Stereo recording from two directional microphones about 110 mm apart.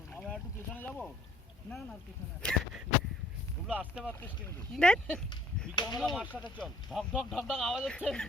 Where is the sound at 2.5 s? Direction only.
5° left (ahead or behind).